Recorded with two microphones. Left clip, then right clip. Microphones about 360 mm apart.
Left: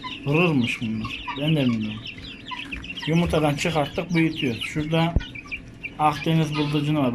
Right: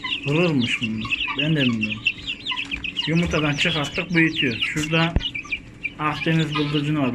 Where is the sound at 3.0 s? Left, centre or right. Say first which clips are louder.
Left 2 dB; centre.